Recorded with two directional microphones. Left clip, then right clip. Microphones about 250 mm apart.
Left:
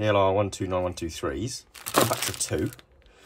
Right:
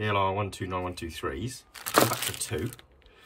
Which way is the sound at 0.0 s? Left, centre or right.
Centre.